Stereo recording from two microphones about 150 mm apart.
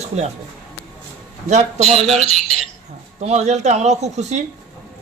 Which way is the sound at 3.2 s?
50° right (ahead or behind).